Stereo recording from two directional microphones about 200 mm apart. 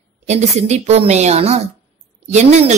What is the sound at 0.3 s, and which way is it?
Speech, 35° right (ahead or behind).